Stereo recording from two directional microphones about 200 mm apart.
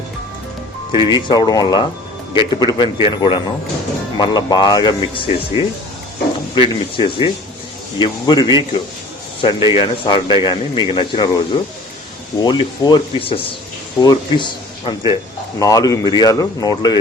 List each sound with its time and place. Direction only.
1.1 s speech: 20° left (ahead or behind)
12.4 s speech: 20° left (ahead or behind)